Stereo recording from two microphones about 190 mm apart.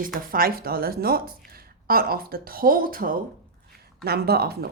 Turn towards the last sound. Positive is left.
turn(degrees=-55)  # may be behind; listen again after turning